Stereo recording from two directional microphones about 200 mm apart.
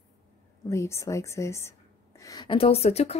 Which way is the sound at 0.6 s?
15° left (ahead or behind).